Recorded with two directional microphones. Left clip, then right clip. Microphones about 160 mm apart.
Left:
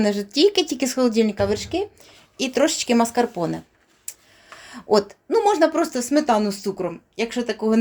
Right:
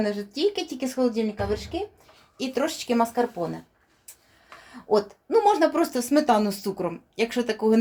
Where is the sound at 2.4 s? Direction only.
60° left (ahead or behind); by 3.5 s 90° left.